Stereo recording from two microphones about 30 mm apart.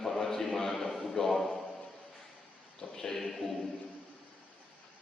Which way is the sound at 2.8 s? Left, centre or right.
Centre.